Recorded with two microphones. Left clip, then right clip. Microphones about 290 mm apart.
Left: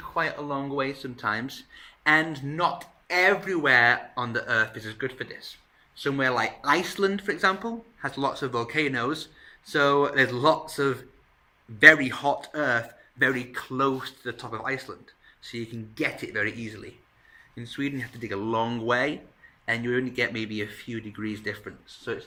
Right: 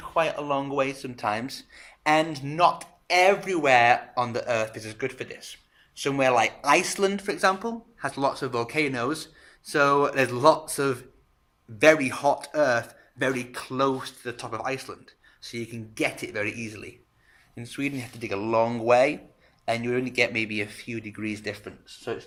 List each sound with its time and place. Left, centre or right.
0.1 s speech: centre